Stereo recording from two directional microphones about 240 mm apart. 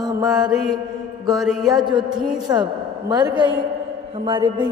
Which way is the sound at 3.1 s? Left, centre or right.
Centre.